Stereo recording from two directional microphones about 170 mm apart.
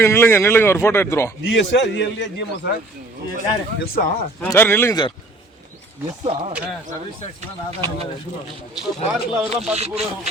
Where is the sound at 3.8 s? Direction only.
60° left (ahead or behind).